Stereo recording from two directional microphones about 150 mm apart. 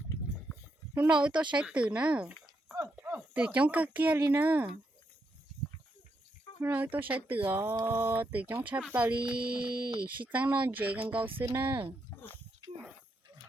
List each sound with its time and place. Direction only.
0.9 s speech: 5° right (ahead or behind)
2.8 s a sound: 5° right (ahead or behind)
3.1 s speech: 10° right (ahead or behind)
6.6 s speech: 10° right (ahead or behind)